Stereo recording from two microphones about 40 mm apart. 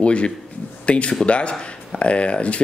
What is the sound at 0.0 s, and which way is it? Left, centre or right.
Speech, left.